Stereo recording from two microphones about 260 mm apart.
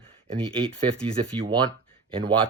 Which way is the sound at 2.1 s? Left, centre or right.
Centre.